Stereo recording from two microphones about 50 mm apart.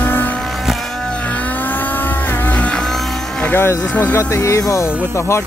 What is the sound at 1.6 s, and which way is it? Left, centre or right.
Vehicle, left.